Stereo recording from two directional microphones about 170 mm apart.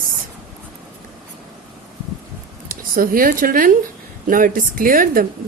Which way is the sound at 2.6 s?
55° right (ahead or behind).